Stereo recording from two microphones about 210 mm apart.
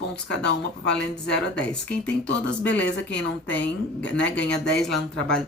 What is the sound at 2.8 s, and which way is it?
Speech, 55° left (ahead or behind).